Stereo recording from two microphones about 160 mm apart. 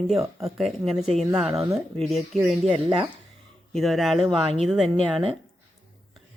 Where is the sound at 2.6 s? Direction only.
35° right (ahead or behind).